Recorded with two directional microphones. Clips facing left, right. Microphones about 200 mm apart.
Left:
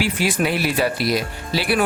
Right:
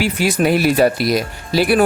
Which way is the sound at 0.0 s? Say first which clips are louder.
Right 4 dB; 45° right (ahead or behind).